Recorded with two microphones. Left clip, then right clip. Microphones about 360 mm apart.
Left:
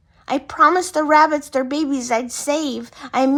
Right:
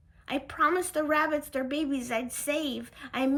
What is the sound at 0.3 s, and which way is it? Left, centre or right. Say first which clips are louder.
A woman's voice: left 12 dB; centre.